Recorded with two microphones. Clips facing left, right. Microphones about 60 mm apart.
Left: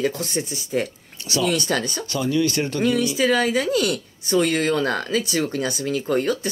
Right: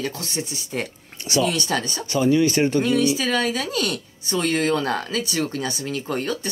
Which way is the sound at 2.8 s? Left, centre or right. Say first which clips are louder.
Left 1 dB; centre.